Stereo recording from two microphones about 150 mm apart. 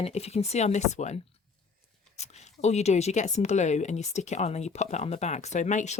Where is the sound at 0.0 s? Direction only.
45° left (ahead or behind).